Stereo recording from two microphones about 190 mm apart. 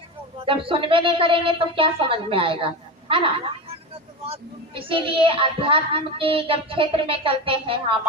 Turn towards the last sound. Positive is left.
turn(degrees=-30)  # may be behind; listen again after turning